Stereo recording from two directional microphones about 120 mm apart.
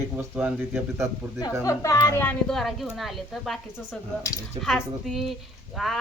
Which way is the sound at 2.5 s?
Centre (ahead or behind).